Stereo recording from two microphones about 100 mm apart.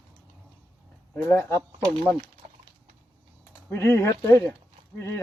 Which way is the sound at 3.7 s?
25° left (ahead or behind).